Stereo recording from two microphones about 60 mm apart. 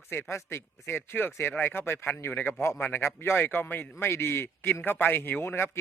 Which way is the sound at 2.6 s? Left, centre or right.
Left.